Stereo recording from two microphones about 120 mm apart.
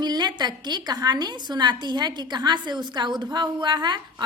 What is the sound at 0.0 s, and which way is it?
A woman's voice, 35° right (ahead or behind).